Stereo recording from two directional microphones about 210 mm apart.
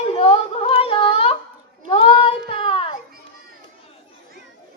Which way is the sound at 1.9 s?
25° left (ahead or behind).